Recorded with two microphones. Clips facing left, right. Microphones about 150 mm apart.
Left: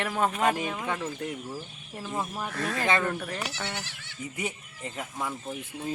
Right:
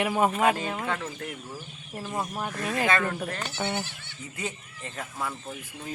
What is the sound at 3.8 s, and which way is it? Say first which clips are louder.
Speech: right 5 dB; 90° left.